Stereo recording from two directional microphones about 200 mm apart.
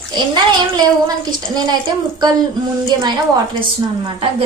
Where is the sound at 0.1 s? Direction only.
20° right (ahead or behind).